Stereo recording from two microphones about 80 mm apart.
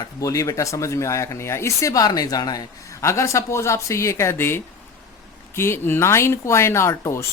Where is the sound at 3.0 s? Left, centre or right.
Left.